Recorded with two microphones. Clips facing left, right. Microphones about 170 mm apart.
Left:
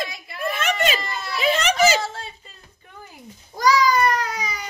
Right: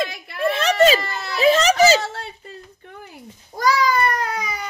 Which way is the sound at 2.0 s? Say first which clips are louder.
Right 1 dB; 70° right (ahead or behind).